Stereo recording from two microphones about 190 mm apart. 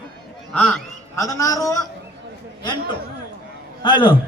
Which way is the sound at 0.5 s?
10° left (ahead or behind).